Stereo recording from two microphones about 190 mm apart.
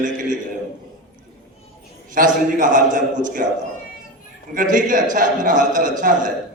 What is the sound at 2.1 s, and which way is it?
A man's voice, 45° right (ahead or behind).